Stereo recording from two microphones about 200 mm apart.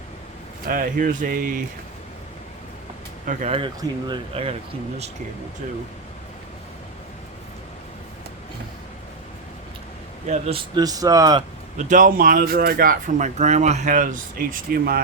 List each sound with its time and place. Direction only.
0.7 s speech: 45° right (ahead or behind)
3.2 s speech: 30° right (ahead or behind)
10.2 s speech: 30° right (ahead or behind)
11.8 s speech: 40° right (ahead or behind)